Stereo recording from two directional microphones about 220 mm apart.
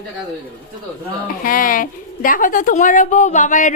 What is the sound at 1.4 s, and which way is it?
A woman's voice, 40° left (ahead or behind).